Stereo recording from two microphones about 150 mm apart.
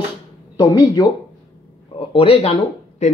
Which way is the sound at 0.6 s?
25° left (ahead or behind).